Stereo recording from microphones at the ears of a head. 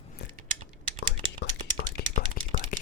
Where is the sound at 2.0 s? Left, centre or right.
Left.